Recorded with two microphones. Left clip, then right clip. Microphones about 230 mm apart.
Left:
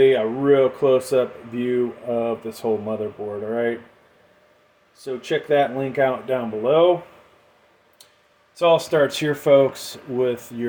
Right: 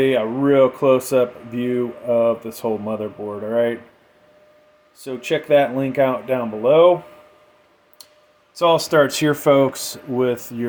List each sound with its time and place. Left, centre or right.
0.0 s speech: right
5.0 s speech: right
8.5 s speech: right